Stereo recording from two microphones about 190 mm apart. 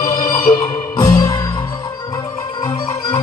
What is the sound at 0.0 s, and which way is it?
Music, 25° left (ahead or behind).